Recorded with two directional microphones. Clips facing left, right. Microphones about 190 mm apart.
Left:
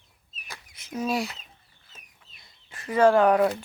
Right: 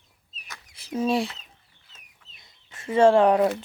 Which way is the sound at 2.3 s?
20° right (ahead or behind).